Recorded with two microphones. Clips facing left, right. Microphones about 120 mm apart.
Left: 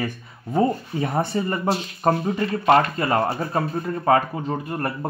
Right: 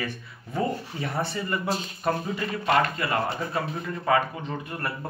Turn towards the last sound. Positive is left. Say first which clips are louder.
# left 6 dB
turn(degrees=40)  # may be behind; listen again after turning